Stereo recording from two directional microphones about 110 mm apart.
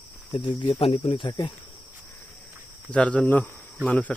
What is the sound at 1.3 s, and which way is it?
Speech, 40° left (ahead or behind).